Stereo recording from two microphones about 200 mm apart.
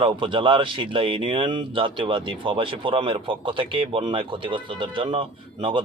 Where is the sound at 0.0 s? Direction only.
25° right (ahead or behind).